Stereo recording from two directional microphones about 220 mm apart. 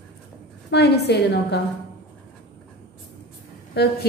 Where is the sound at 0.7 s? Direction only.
50° left (ahead or behind).